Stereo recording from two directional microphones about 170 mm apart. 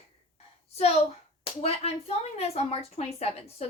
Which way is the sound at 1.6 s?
35° left (ahead or behind).